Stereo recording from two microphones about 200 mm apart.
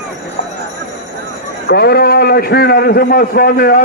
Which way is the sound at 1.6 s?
55° left (ahead or behind).